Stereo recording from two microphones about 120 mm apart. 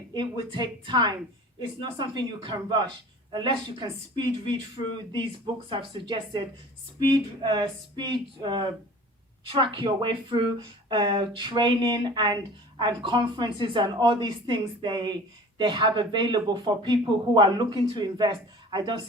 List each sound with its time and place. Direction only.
0.1 s a woman's voice: 40° right (ahead or behind)